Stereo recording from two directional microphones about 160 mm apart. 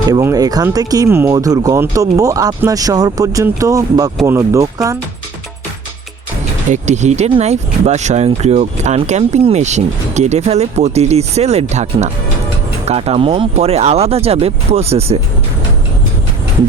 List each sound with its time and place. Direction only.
0.1 s speech: 20° right (ahead or behind)
6.7 s speech: 45° right (ahead or behind)